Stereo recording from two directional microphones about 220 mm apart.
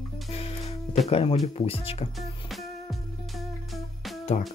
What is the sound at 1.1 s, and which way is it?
Speech, 25° left (ahead or behind).